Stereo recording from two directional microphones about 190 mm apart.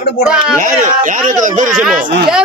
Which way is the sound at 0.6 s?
45° right (ahead or behind).